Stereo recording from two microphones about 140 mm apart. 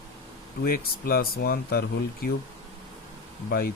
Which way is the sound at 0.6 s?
90° left.